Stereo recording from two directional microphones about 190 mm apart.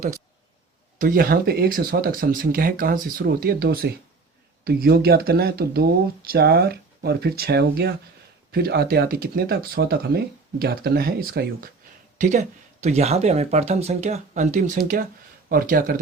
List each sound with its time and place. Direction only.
0.9 s speech: 50° right (ahead or behind)
12.1 s speech: 40° right (ahead or behind)